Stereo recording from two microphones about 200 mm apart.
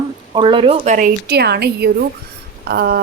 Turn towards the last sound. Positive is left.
turn(degrees=-50)  # may be behind; listen again after turning